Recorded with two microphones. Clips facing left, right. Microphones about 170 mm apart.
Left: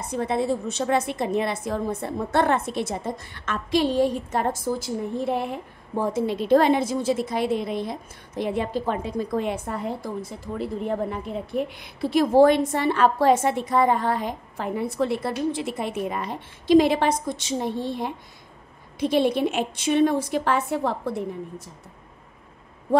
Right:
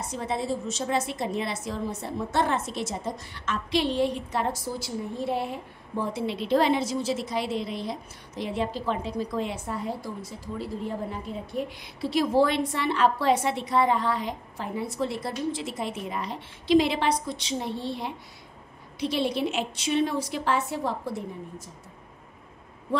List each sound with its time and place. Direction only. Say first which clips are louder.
0.1 s a woman's voice: left 6 dB; 60° left (ahead or behind)